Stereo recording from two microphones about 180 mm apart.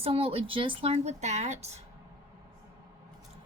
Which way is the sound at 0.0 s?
30° right (ahead or behind).